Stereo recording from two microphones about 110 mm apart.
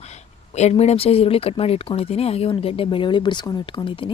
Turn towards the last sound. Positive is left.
turn(degrees=50)  # may be behind; listen again after turning